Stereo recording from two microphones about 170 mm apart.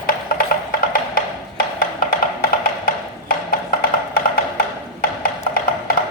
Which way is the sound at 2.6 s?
60° left (ahead or behind).